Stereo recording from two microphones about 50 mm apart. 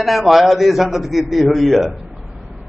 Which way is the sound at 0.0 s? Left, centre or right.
Centre.